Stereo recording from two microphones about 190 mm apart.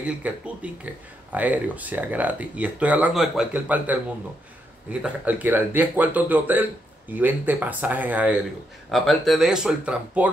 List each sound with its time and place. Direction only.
0.0 s speech: 5° right (ahead or behind)
5.0 s speech: 10° right (ahead or behind)